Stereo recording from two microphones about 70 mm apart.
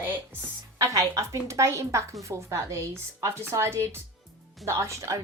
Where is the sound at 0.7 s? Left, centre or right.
Right.